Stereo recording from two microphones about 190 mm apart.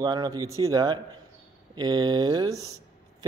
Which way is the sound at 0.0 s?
20° right (ahead or behind).